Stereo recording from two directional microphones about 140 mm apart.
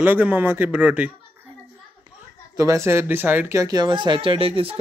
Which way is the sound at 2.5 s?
20° right (ahead or behind).